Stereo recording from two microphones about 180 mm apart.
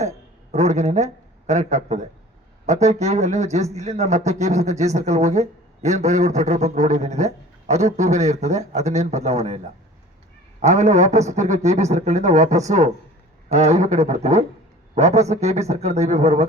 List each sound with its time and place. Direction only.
0.5 s a man's voice: 40° right (ahead or behind)
10.6 s speech: 40° right (ahead or behind)